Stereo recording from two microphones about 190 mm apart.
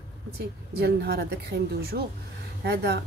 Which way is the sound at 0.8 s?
60° right (ahead or behind).